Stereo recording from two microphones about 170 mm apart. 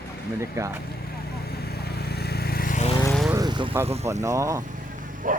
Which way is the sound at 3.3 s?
25° right (ahead or behind).